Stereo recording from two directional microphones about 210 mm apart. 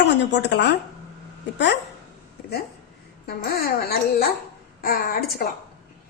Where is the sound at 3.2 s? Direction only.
50° left (ahead or behind).